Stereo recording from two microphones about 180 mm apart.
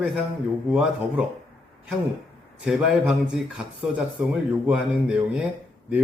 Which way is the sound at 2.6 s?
5° right (ahead or behind).